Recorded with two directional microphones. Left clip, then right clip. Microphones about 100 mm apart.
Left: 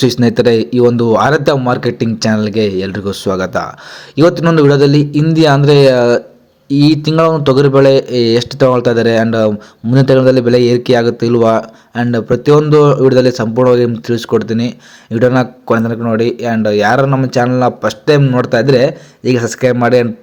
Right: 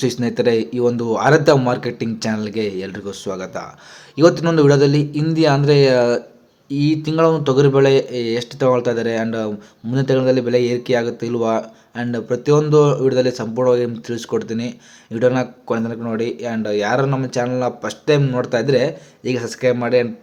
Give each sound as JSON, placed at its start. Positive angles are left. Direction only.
{"t": 0.0, "sound": "speech", "side_deg": 45}
{"t": 4.1, "sound": "speech", "side_deg": 35}
{"t": 9.9, "sound": "speech", "side_deg": 60}